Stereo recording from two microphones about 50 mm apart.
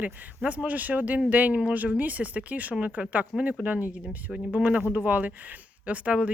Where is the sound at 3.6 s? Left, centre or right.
Right.